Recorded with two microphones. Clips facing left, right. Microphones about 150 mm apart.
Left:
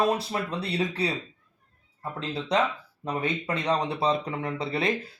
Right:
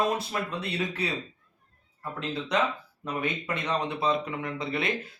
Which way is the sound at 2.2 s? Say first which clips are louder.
Left 2 dB; 30° left (ahead or behind).